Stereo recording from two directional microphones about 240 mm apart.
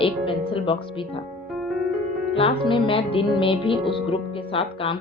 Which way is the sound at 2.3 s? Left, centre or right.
Left.